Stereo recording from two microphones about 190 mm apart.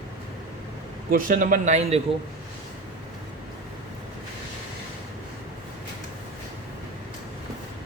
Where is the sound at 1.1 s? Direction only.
45° right (ahead or behind).